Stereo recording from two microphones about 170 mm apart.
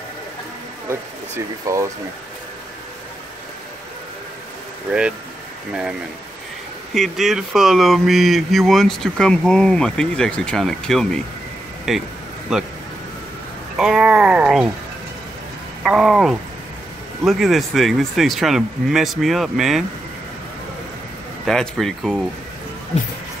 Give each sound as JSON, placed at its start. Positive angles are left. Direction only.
{"t": 1.7, "sound": "speech", "side_deg": -20}
{"t": 6.9, "sound": "speech", "side_deg": 0}
{"t": 13.7, "sound": "speech", "side_deg": -5}
{"t": 15.8, "sound": "speech", "side_deg": 0}
{"t": 21.5, "sound": "speech", "side_deg": 0}